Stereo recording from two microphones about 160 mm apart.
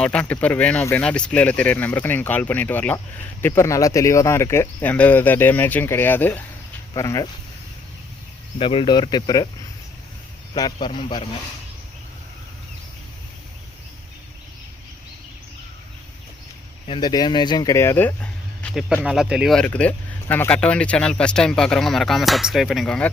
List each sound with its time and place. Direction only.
0.0 s speech: 5° left (ahead or behind)
8.5 s speech: 35° left (ahead or behind)
10.5 s speech: 30° left (ahead or behind)
16.8 s speech: 30° left (ahead or behind); by 23.0 s 5° left (ahead or behind)